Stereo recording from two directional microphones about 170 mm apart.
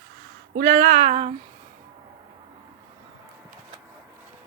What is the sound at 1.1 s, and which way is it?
Speech, 40° right (ahead or behind).